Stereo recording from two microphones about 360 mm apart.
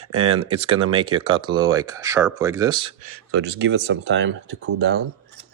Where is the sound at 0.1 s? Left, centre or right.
Right.